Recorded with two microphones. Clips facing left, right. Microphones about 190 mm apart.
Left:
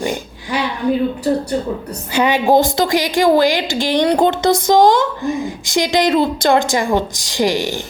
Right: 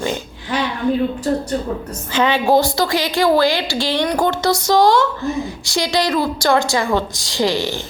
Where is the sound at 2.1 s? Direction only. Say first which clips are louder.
Left 2 dB; 15° left (ahead or behind).